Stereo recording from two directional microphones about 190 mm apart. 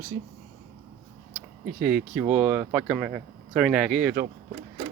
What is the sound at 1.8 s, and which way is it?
Speech, 5° right (ahead or behind).